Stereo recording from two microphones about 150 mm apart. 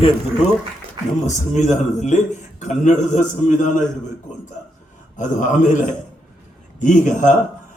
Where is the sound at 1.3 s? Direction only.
55° left (ahead or behind).